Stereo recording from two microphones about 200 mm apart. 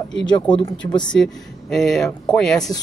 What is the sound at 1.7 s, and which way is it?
Speech, centre (ahead or behind).